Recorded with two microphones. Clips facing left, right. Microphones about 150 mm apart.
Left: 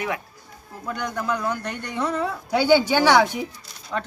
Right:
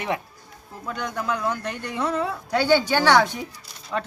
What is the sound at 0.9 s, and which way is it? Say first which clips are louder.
A woman's voice: left 1 dB; centre (ahead or behind).